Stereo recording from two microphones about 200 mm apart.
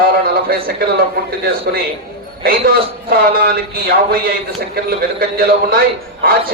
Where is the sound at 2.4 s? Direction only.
50° right (ahead or behind).